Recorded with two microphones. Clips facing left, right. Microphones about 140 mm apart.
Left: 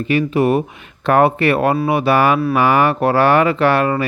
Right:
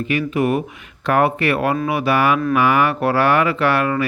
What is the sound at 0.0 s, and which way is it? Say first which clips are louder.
Speech: left 3 dB; 30° left (ahead or behind).